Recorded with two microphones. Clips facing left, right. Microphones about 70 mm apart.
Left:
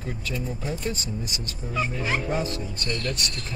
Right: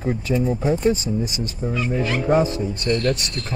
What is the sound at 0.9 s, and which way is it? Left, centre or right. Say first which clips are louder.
Speech: right 9 dB; left.